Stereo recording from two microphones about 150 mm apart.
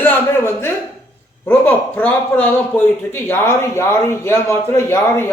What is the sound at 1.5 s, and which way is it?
Speech, 10° left (ahead or behind).